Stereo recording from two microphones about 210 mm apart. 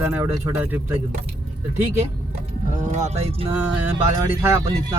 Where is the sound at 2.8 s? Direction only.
35° right (ahead or behind).